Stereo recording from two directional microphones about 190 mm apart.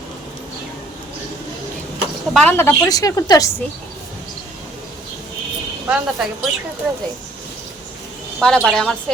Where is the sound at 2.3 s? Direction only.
10° left (ahead or behind).